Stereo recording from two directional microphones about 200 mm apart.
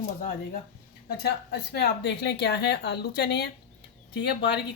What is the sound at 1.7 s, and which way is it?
Speech, 55° left (ahead or behind).